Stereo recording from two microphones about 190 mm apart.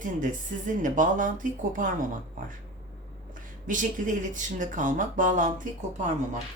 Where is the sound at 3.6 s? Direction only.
45° right (ahead or behind).